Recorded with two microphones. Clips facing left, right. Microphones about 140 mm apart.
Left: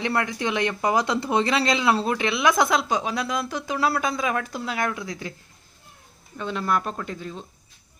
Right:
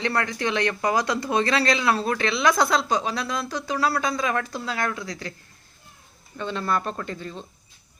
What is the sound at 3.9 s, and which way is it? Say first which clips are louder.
Speech: even; 5° left (ahead or behind).